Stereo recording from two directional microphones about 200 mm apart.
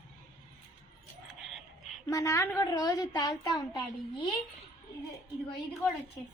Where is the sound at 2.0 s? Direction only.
15° left (ahead or behind).